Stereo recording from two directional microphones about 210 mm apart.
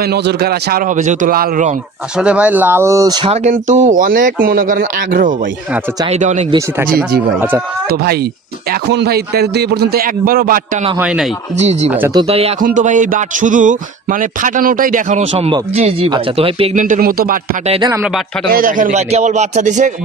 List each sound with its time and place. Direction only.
0.0 s a man's voice: 50° right (ahead or behind)
2.1 s speech: 5° right (ahead or behind)
3.4 s speech: 35° right (ahead or behind)
7.9 s a man's voice: 50° right (ahead or behind)
11.0 s speech: 5° right (ahead or behind)
11.5 s speech: 30° right (ahead or behind)
17.6 s speech: 25° right (ahead or behind)
17.9 s speech: 5° right (ahead or behind)
18.5 s speech: 40° right (ahead or behind)